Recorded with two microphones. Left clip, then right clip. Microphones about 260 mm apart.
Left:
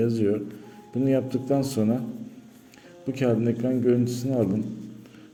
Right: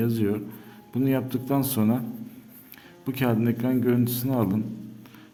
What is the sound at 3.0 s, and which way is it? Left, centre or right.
Speech, centre.